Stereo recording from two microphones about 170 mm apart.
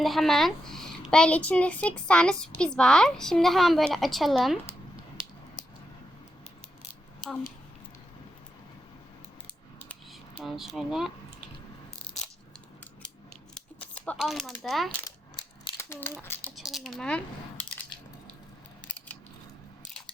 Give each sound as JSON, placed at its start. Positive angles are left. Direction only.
{"t": 0.0, "sound": "a child's voice", "side_deg": 0}
{"t": 9.7, "sound": "a sound", "side_deg": 5}
{"t": 13.0, "sound": "scissors", "side_deg": 5}
{"t": 14.2, "sound": "a child's voice", "side_deg": 0}
{"t": 15.8, "sound": "speech", "side_deg": 15}
{"t": 16.6, "sound": "coin", "side_deg": 0}
{"t": 18.9, "sound": "scissors", "side_deg": 5}